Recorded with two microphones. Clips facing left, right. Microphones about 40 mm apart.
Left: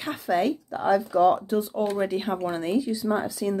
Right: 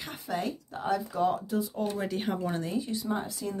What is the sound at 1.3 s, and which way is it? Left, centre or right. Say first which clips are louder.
Speech: left 6 dB; left.